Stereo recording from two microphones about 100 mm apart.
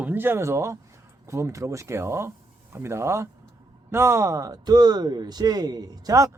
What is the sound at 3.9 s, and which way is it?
Music, 25° right (ahead or behind).